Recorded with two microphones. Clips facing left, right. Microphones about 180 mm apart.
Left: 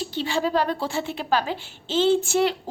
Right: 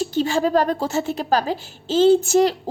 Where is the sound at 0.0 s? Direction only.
45° right (ahead or behind).